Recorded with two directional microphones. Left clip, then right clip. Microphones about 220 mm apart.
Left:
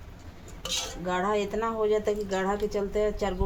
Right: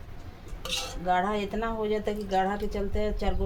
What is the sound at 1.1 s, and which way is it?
A woman's voice, 30° left (ahead or behind).